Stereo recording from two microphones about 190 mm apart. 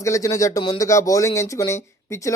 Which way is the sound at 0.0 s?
15° left (ahead or behind).